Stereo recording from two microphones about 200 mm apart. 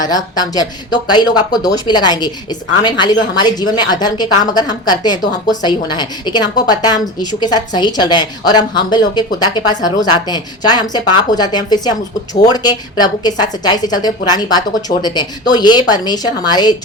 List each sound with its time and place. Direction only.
0.0 s a woman's voice: 20° left (ahead or behind)